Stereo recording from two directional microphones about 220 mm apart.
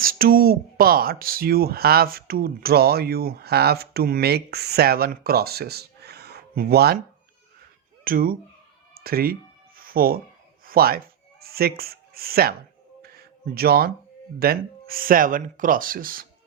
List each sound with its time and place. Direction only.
0.0 s speech: 40° right (ahead or behind)
8.0 s speech: 40° right (ahead or behind)
9.0 s music: 45° right (ahead or behind)
10.7 s a sound: 45° right (ahead or behind)
14.3 s speech: 45° right (ahead or behind)